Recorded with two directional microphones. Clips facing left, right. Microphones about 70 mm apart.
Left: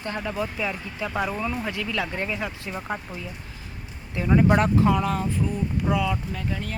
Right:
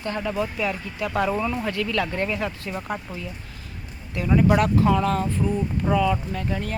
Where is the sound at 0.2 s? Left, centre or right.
Centre.